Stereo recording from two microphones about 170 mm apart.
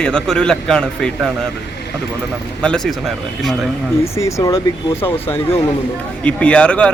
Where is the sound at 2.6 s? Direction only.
5° left (ahead or behind).